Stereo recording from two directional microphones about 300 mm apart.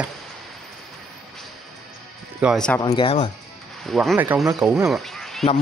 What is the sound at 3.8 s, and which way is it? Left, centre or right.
Speech, centre.